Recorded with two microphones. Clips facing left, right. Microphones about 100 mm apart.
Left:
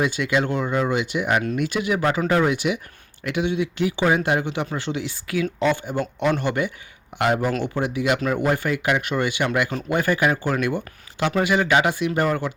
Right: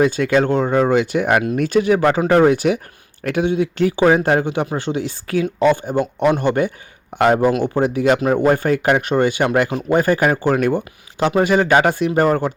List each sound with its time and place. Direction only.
0.0 s speech: 40° right (ahead or behind)